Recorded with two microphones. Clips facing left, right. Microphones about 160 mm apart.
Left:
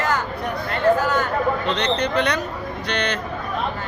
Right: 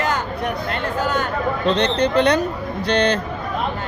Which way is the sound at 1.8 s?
30° right (ahead or behind).